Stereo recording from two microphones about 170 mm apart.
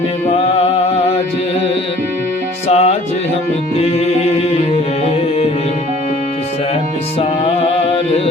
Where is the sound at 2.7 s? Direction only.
40° left (ahead or behind).